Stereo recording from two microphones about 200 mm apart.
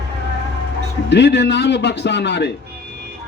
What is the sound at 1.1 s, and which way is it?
Speech, 60° left (ahead or behind).